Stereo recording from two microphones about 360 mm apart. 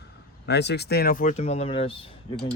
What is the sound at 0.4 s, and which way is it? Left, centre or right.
Speech, left.